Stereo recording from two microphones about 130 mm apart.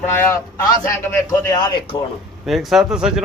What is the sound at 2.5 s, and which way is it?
Speech, 5° right (ahead or behind).